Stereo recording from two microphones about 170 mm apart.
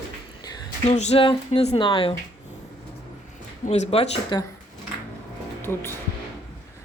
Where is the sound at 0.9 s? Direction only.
40° left (ahead or behind).